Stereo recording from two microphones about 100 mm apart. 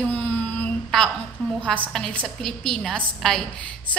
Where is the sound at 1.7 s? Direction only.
10° left (ahead or behind).